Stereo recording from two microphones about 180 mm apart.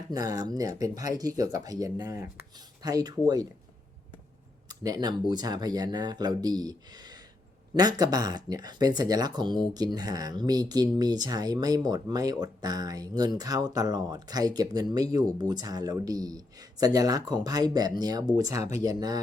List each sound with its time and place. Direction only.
0.1 s speech: 20° right (ahead or behind)
4.7 s speech: 20° right (ahead or behind)